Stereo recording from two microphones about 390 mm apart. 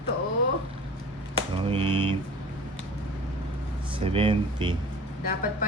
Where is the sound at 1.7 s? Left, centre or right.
Centre.